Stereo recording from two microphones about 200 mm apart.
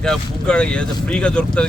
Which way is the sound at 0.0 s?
5° left (ahead or behind).